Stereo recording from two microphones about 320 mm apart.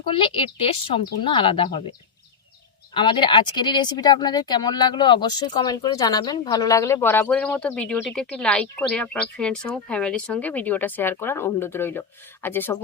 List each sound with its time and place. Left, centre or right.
0.1 s speech: centre
2.9 s speech: centre